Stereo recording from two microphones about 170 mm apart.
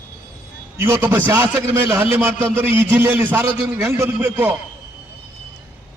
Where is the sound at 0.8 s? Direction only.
15° right (ahead or behind).